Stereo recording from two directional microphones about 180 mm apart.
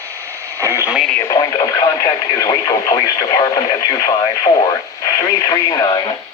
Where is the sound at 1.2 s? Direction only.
20° left (ahead or behind).